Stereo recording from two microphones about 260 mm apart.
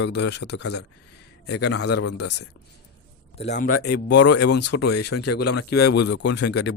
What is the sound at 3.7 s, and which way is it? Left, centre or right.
Speech, left.